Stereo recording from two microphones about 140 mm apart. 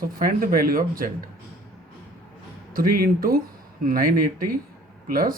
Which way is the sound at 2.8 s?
90° right.